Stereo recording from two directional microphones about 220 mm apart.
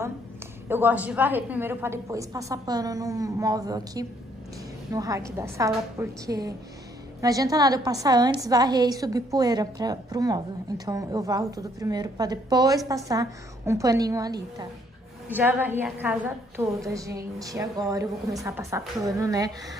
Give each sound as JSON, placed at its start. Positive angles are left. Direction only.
{"t": 0.7, "sound": "a woman's voice", "side_deg": -10}